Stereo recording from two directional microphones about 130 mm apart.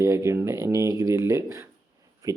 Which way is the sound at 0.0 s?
25° right (ahead or behind).